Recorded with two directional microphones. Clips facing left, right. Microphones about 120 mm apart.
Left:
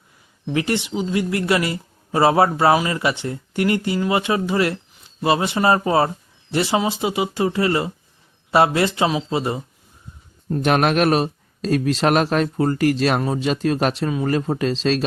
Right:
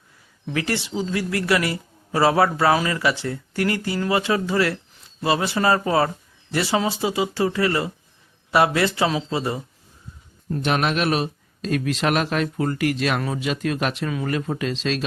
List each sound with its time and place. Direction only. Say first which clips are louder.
0.5 s speech: left 3 dB; 20° left (ahead or behind)
10.6 s speech: left 5 dB; 45° left (ahead or behind)